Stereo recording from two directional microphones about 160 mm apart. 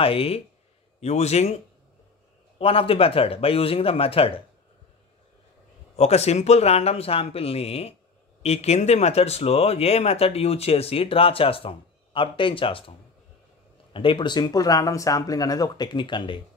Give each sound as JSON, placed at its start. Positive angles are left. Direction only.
{"t": 0.0, "sound": "speech", "side_deg": 35}
{"t": 2.6, "sound": "speech", "side_deg": 35}
{"t": 5.9, "sound": "speech", "side_deg": 40}
{"t": 13.9, "sound": "speech", "side_deg": 30}